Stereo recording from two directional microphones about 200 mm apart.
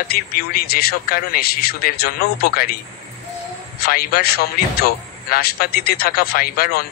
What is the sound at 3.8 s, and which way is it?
Speech, 50° left (ahead or behind).